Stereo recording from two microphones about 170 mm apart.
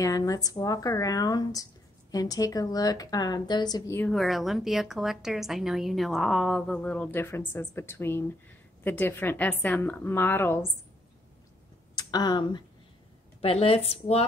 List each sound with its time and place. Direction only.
0.0 s speech: 20° left (ahead or behind)
4.1 s a woman's voice: centre (ahead or behind)
11.9 s speech: 25° left (ahead or behind)